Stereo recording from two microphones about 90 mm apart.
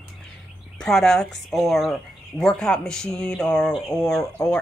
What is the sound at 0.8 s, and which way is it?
A woman's voice, 5° left (ahead or behind).